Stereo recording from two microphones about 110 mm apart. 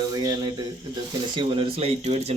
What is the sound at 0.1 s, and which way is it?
Speech, 35° right (ahead or behind).